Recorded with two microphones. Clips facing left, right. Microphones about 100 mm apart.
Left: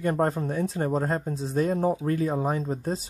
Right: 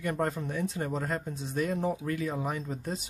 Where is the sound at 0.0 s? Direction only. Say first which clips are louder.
Left 6 dB; 35° left (ahead or behind).